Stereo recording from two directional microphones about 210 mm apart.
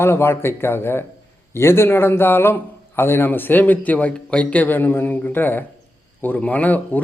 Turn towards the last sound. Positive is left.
turn(degrees=10)  # may be behind; listen again after turning